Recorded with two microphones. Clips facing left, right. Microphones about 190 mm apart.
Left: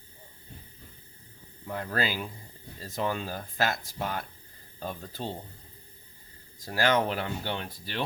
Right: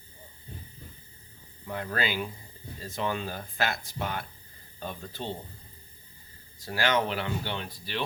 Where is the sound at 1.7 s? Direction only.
35° left (ahead or behind).